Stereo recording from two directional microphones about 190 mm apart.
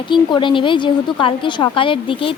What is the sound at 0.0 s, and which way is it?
A woman's voice, 25° left (ahead or behind).